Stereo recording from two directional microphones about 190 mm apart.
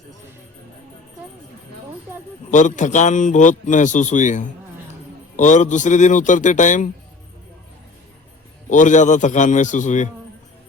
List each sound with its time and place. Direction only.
2.5 s a man's voice: 40° left (ahead or behind)
8.7 s a man's voice: 40° left (ahead or behind)